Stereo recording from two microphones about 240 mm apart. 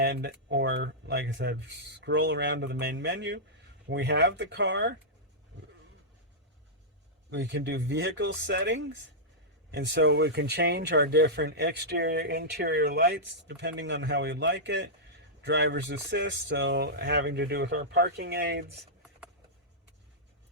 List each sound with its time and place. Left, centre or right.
0.0 s speech: right
7.3 s speech: right